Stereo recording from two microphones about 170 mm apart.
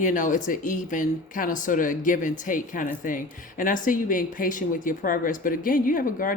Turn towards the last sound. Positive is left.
turn(degrees=55)  # may be behind; listen again after turning